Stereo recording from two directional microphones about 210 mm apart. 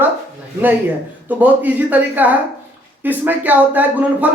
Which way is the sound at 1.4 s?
10° right (ahead or behind).